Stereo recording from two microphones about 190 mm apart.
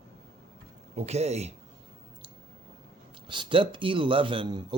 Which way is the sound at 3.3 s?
25° right (ahead or behind).